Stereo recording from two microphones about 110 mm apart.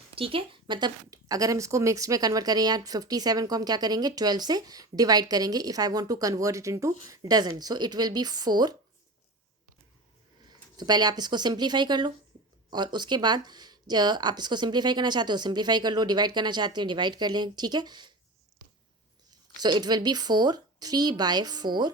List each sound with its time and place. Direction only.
0.2 s speech: 55° right (ahead or behind)
10.8 s speech: 40° right (ahead or behind)
19.6 s speech: 40° right (ahead or behind)